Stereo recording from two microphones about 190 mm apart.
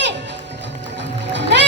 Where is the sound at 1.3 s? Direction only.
65° right (ahead or behind).